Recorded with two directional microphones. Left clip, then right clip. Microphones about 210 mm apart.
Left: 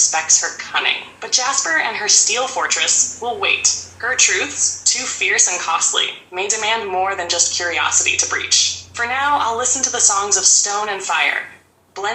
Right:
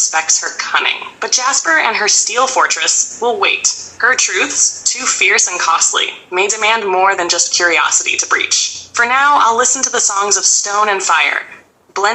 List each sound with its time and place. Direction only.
0.1 s a woman's voice: 30° right (ahead or behind)